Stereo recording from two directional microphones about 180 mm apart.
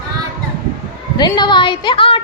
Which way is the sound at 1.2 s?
25° left (ahead or behind).